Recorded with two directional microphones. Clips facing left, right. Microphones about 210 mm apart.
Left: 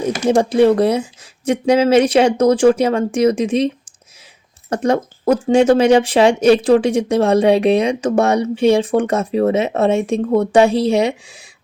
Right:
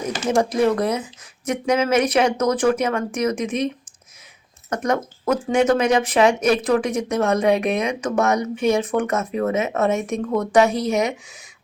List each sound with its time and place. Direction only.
0.3 s speech: 30° left (ahead or behind)
4.7 s speech: 30° left (ahead or behind)